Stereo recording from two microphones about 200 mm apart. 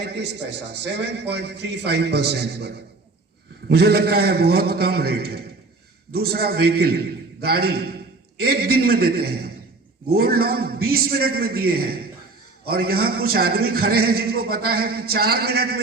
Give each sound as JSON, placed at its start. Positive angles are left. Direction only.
{"t": 0.7, "sound": "a man's voice", "side_deg": -60}